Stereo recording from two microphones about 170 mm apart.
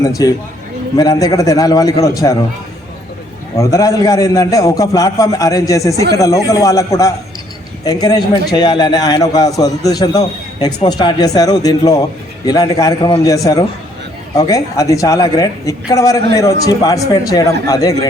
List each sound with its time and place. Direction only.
0.0 s a man's voice: 20° left (ahead or behind)
3.6 s a man's voice: 20° left (ahead or behind)